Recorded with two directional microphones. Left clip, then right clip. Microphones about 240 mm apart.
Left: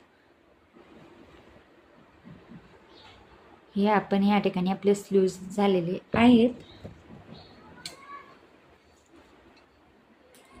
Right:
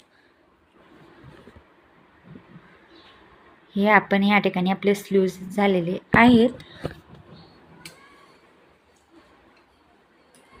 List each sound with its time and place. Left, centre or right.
3.7 s speech: centre